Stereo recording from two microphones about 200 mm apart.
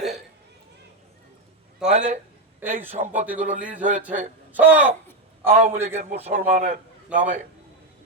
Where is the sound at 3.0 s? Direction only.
40° right (ahead or behind).